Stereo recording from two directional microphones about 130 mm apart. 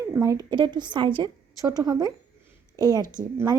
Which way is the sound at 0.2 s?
25° right (ahead or behind).